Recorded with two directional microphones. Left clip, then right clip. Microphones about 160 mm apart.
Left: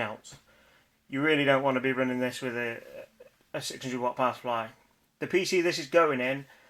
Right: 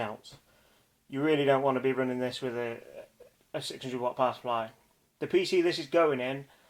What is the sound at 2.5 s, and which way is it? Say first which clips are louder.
Speech: left 2 dB; 15° left (ahead or behind).